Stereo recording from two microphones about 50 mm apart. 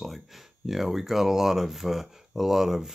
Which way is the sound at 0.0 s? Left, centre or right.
Centre.